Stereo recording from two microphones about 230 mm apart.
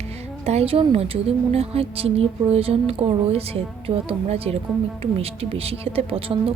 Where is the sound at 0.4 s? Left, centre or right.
Right.